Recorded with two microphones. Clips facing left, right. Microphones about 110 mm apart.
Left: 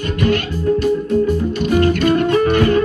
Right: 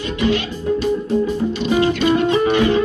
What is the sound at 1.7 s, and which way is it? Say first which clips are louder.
Music: left 2 dB; 50° left (ahead or behind).